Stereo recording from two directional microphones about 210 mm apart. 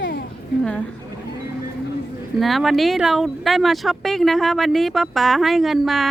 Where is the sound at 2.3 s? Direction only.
Centre (ahead or behind).